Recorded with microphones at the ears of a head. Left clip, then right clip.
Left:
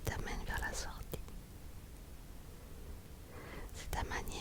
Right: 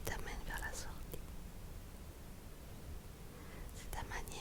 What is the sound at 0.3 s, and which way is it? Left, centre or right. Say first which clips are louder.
Whispering: left 4 dB; left.